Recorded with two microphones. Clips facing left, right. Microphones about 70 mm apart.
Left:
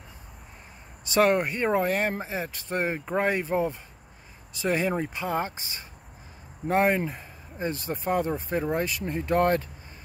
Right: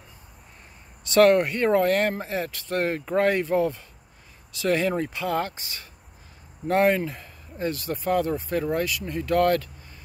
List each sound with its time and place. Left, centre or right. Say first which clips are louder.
1.1 s speech: right 5 dB; centre